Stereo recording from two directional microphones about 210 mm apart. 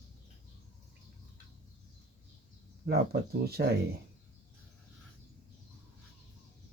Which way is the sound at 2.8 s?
50° right (ahead or behind).